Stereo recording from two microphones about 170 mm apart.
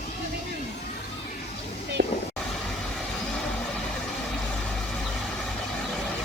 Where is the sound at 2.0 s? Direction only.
85° right.